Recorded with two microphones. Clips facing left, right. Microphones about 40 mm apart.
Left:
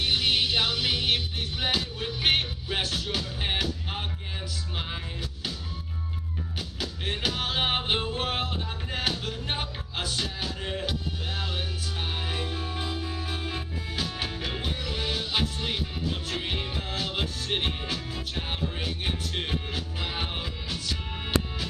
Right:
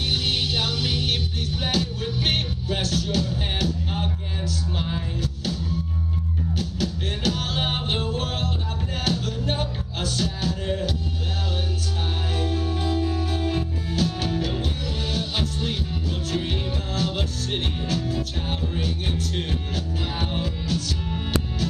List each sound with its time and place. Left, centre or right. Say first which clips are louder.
0.1 s music: even; centre
12.4 s music: right 6 dB; centre